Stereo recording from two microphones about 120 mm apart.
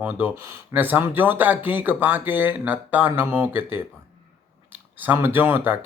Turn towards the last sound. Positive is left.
turn(degrees=-15)  # may be behind; listen again after turning